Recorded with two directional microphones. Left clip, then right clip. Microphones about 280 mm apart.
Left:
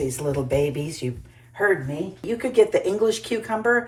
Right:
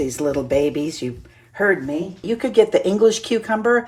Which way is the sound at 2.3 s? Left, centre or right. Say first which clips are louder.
Right 3 dB; centre.